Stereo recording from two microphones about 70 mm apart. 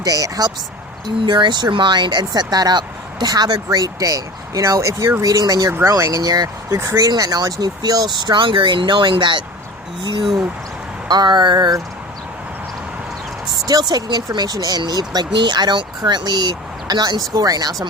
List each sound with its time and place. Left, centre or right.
0.0 s speech: right
1.0 s speech: right
6.7 s speech: right
7.1 s speech: right
11.1 s speech: right
13.7 s speech: right
14.3 s speech: right
17.3 s speech: right